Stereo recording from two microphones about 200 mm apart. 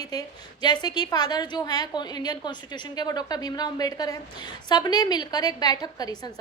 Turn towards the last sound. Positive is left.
turn(degrees=20)  # may be behind; listen again after turning